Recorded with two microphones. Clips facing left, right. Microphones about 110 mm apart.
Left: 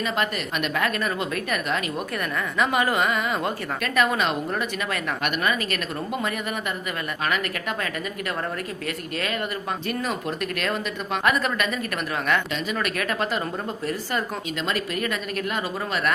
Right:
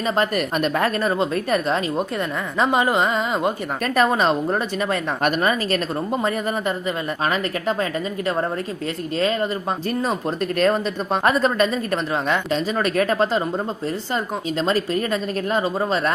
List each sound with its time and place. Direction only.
0.3 s speech: 35° right (ahead or behind)
7.3 s speech: 30° right (ahead or behind)
9.1 s speech: 30° right (ahead or behind)
14.6 s speech: 30° right (ahead or behind)